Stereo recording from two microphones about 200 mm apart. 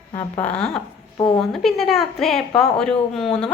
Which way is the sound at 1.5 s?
Centre (ahead or behind).